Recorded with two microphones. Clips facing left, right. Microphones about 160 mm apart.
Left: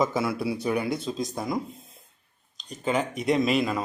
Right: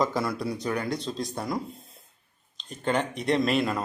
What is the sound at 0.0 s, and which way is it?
Speech, 5° left (ahead or behind).